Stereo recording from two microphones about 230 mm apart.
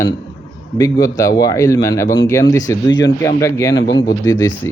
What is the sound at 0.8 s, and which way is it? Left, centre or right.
A man's voice, centre.